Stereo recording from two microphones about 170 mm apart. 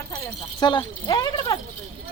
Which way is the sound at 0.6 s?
25° left (ahead or behind).